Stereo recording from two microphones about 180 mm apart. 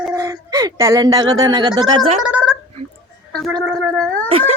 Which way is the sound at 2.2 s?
5° right (ahead or behind).